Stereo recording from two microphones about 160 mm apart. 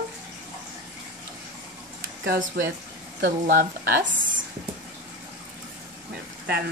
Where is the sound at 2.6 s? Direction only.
90° right.